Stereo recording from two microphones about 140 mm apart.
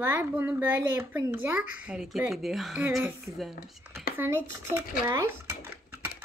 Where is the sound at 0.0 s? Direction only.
15° right (ahead or behind).